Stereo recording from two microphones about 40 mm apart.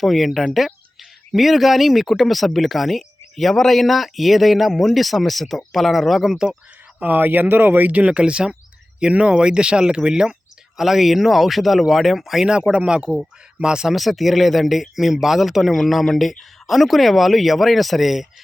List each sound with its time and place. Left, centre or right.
0.0 s speech: centre
6.3 s speech: centre
7.0 s speech: right
8.1 s speech: right; by 12.4 s centre
12.4 s speech: centre
13.9 s speech: centre